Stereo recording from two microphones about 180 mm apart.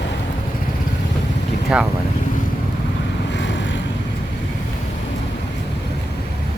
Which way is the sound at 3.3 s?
90° left.